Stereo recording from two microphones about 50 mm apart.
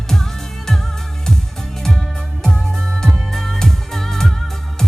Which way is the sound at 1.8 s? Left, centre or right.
Centre.